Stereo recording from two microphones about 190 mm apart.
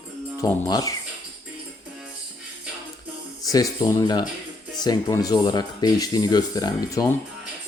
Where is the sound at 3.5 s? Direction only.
20° left (ahead or behind).